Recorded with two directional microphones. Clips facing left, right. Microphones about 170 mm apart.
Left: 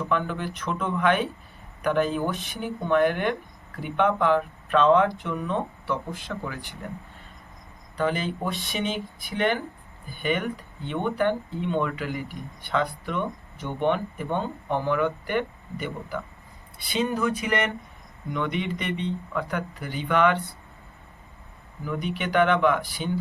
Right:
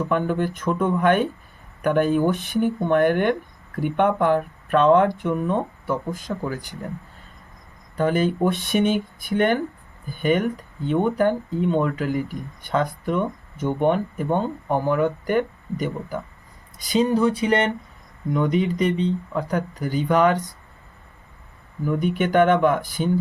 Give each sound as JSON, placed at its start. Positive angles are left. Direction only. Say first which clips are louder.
{"t": 0.1, "sound": "speech", "louder": "right 4 dB", "side_deg": -50}
{"t": 7.9, "sound": "speech", "louder": "right 6 dB", "side_deg": -45}
{"t": 21.8, "sound": "speech", "louder": "right 7 dB", "side_deg": -50}